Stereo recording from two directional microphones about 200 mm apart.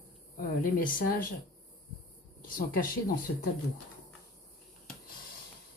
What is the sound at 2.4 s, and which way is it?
Speech, 45° left (ahead or behind).